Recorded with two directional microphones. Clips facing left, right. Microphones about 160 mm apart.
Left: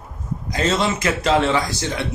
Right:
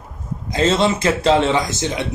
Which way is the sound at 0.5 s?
25° right (ahead or behind).